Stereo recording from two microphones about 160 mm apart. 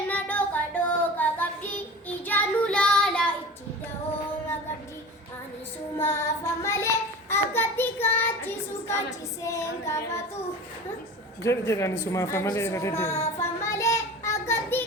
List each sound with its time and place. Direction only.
0.1 s music: 10° left (ahead or behind)
2.2 s child singing: 10° left (ahead or behind)
6.0 s child singing: 15° left (ahead or behind)
9.0 s female singing: 20° left (ahead or behind)
11.4 s a sound: 20° left (ahead or behind)